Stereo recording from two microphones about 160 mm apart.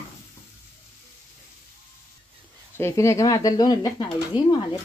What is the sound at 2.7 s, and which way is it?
Speech, 15° left (ahead or behind).